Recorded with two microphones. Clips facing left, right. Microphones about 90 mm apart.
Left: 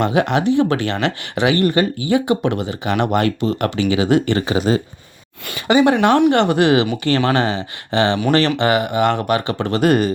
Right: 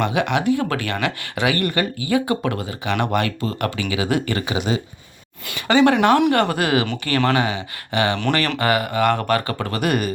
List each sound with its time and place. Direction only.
0.0 s speech: 30° left (ahead or behind)
5.6 s speech: 15° left (ahead or behind)
9.6 s speech: 30° left (ahead or behind)